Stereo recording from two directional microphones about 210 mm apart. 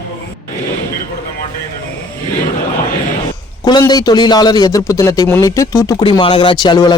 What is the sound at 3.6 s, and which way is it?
Speech, 20° left (ahead or behind).